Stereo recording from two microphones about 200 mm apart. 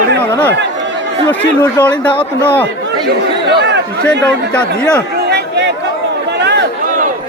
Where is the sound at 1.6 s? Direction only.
10° left (ahead or behind).